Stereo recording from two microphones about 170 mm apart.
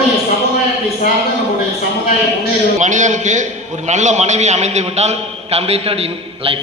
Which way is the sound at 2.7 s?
45° right (ahead or behind).